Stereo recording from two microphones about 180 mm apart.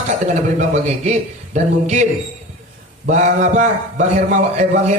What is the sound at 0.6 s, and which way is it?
A man's voice, 40° right (ahead or behind).